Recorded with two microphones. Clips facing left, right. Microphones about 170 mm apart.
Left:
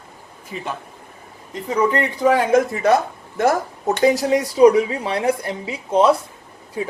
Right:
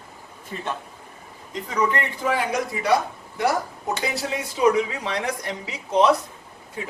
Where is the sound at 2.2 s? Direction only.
45° left (ahead or behind); by 6.1 s 30° left (ahead or behind).